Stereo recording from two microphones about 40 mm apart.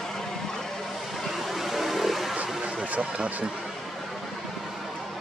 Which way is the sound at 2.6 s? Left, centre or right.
Right.